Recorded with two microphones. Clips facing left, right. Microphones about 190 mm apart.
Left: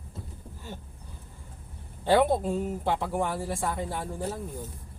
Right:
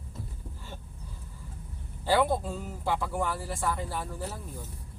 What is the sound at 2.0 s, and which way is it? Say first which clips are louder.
Speech: left 3 dB; 25° left (ahead or behind).